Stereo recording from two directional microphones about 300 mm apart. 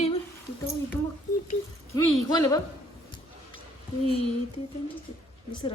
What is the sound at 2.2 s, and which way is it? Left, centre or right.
Speech, centre.